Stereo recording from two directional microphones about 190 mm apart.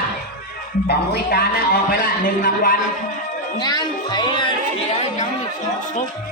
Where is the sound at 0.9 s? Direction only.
55° left (ahead or behind).